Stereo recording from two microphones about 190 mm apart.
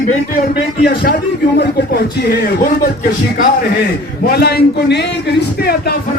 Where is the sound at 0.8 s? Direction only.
55° left (ahead or behind).